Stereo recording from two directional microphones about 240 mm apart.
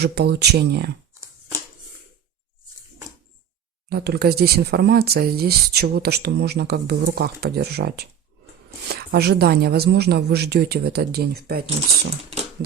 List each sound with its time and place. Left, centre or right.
0.0 s speech: right
3.8 s speech: right